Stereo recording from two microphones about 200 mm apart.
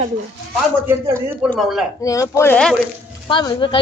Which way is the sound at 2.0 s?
15° left (ahead or behind).